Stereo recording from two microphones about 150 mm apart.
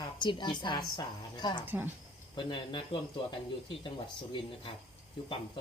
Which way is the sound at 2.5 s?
30° left (ahead or behind).